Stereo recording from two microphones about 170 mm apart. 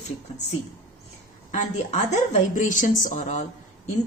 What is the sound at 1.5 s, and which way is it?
A woman's voice, 45° left (ahead or behind).